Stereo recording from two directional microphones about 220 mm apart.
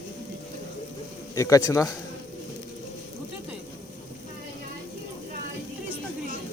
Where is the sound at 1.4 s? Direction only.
15° left (ahead or behind).